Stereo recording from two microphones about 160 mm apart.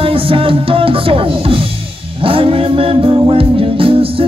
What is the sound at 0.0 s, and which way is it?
Music, 35° right (ahead or behind).